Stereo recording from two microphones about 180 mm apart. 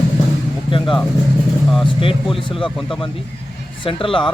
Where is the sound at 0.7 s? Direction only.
30° left (ahead or behind).